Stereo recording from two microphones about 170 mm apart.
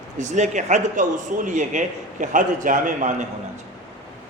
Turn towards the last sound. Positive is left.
turn(degrees=-50)  # may be behind; listen again after turning